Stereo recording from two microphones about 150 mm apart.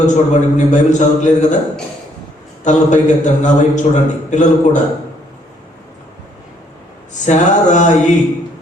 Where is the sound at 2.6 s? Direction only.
55° left (ahead or behind).